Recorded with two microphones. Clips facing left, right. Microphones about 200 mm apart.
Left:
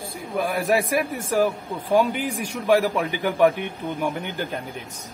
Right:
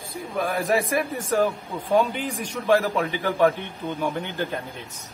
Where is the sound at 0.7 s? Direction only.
10° left (ahead or behind).